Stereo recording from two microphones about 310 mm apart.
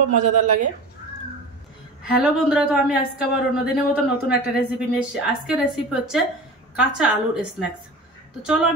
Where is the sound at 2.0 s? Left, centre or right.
Centre.